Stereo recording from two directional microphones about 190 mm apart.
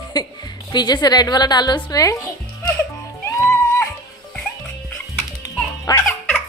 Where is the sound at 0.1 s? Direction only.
20° left (ahead or behind).